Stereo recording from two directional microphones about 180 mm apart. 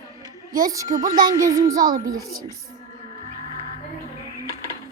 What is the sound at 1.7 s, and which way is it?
Speech, 50° right (ahead or behind).